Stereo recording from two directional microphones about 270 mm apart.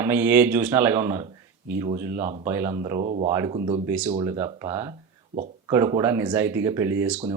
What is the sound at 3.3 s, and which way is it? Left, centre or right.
Speech, centre.